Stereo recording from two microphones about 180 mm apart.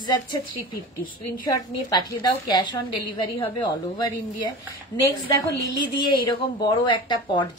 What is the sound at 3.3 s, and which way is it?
Speech, 25° left (ahead or behind).